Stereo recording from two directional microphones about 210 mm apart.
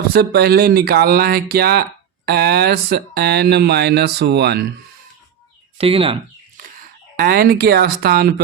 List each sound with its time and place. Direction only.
0.1 s speech: 45° right (ahead or behind)
5.7 s speech: 25° right (ahead or behind)
7.2 s speech: 45° right (ahead or behind)